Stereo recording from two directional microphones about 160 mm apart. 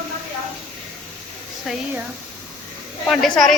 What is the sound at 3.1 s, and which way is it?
Speech, centre (ahead or behind).